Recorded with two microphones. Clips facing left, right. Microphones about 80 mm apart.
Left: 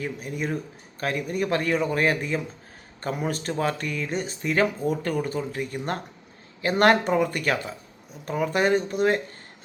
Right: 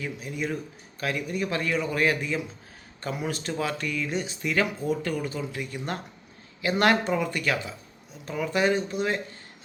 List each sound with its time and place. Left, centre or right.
0.0 s a man's voice: left